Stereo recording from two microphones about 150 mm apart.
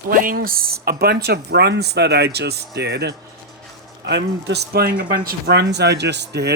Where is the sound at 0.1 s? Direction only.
65° right (ahead or behind).